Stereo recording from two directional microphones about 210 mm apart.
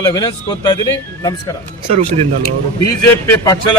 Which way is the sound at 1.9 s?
30° right (ahead or behind).